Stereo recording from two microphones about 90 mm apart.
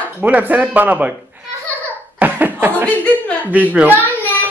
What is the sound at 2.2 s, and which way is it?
Laughter, 20° right (ahead or behind).